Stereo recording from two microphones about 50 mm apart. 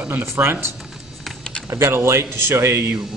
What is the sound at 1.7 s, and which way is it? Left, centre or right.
Speech, right.